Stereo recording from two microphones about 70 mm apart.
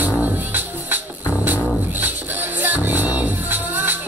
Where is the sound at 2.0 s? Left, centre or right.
Right.